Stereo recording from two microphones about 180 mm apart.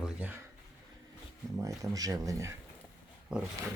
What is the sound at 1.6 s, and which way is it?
Speech, 20° right (ahead or behind).